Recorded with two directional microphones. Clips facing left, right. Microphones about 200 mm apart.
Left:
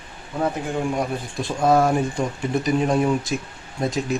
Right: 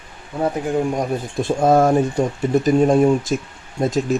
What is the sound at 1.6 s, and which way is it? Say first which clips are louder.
Speech: right 3 dB; 45° right (ahead or behind).